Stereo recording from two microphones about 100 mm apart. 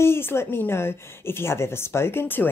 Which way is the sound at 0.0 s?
25° left (ahead or behind).